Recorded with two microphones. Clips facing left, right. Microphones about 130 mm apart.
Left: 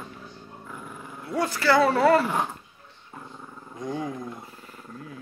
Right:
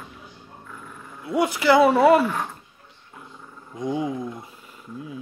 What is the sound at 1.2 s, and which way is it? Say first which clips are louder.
Speech: right 4 dB; 15° right (ahead or behind).